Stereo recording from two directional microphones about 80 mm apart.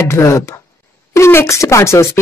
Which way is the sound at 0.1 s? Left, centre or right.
Left.